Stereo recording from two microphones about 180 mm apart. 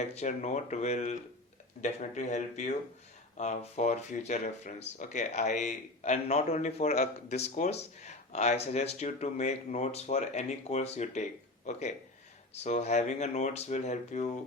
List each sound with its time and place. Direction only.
0.0 s a man's voice: 40° left (ahead or behind)